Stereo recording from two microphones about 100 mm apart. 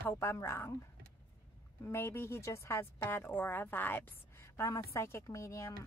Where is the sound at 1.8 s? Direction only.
25° left (ahead or behind).